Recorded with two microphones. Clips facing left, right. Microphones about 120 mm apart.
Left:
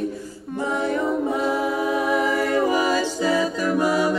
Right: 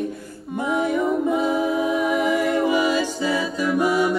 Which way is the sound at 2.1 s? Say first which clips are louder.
Even; 40° left (ahead or behind).